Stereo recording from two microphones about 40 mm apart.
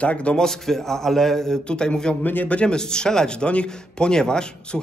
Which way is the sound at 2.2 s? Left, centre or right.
Left.